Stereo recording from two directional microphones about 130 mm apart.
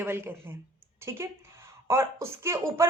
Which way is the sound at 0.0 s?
20° right (ahead or behind).